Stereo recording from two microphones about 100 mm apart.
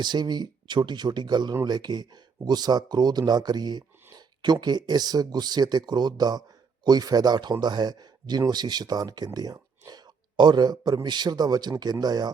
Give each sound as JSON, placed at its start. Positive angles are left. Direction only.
{"t": 0.0, "sound": "speech", "side_deg": -45}